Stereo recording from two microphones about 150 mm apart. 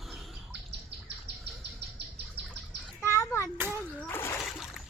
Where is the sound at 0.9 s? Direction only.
90° right.